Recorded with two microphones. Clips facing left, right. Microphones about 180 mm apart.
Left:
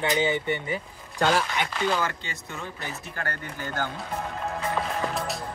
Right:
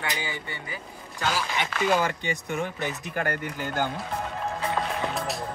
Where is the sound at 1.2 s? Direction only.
55° left (ahead or behind).